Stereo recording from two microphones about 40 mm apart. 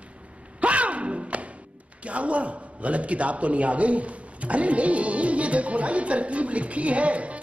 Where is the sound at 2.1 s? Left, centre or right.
Right.